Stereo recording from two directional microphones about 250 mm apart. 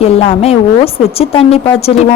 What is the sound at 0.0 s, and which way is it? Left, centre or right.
A woman's voice, left.